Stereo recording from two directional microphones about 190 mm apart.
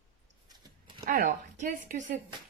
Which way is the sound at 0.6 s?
20° right (ahead or behind).